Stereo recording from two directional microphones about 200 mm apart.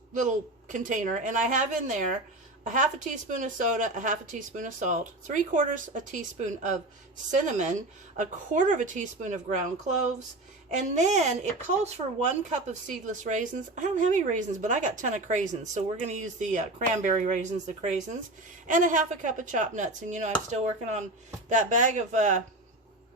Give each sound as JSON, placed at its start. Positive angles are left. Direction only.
{"t": 0.7, "sound": "speech", "side_deg": -40}